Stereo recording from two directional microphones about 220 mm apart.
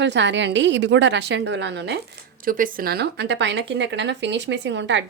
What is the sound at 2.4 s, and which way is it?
Speech, 40° right (ahead or behind).